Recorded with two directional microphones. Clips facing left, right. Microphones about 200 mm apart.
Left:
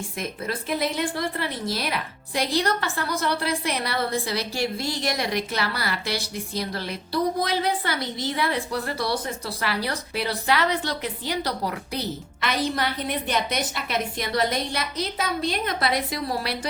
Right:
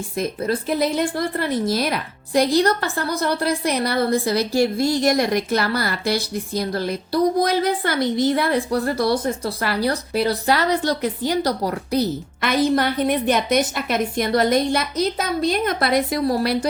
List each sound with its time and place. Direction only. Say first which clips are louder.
0.2 s speech: right 9 dB; 40° right (ahead or behind)